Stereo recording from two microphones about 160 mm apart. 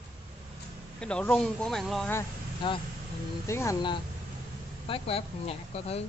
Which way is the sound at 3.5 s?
15° left (ahead or behind).